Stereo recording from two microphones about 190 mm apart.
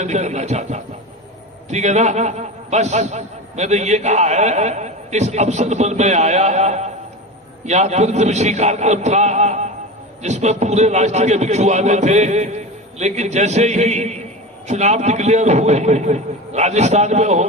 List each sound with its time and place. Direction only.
0.0 s a man's voice: 35° right (ahead or behind)